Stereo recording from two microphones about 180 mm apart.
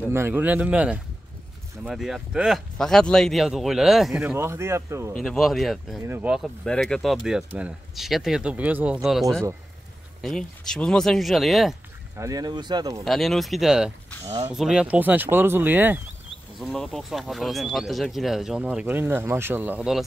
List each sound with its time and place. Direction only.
0.1 s speech: 10° right (ahead or behind)
5.1 s speech: centre (ahead or behind)
5.9 s speech: 15° right (ahead or behind)
10.2 s speech: 5° left (ahead or behind)
12.2 s speech: 20° right (ahead or behind)
13.0 s speech: centre (ahead or behind)
16.5 s speech: centre (ahead or behind)